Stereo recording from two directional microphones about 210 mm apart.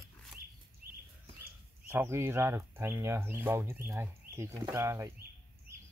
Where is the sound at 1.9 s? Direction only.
10° right (ahead or behind).